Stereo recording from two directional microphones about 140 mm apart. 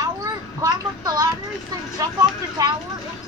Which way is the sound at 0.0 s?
25° right (ahead or behind).